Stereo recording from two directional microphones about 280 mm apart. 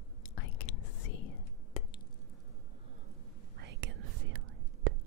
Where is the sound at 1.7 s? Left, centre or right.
Left.